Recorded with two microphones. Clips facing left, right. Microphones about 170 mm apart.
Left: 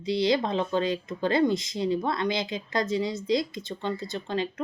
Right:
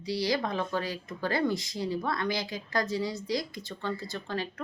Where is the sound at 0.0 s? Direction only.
20° left (ahead or behind).